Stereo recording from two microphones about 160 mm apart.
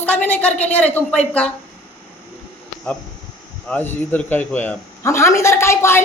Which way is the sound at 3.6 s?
10° left (ahead or behind).